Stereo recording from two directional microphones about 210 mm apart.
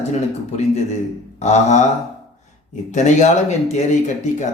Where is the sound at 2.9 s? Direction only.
35° left (ahead or behind).